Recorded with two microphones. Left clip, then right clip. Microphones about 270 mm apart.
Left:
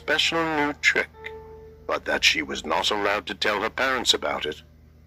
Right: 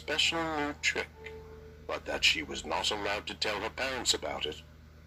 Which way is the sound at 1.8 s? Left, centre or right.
Left.